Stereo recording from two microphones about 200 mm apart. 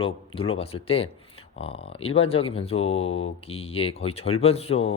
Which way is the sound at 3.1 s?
90° left.